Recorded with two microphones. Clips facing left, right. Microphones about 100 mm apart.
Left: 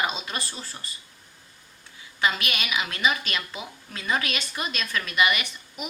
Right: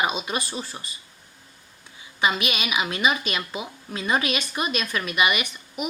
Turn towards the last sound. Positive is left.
turn(degrees=-15)  # may be behind; listen again after turning